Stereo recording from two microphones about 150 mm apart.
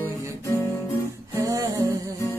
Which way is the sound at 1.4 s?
20° right (ahead or behind).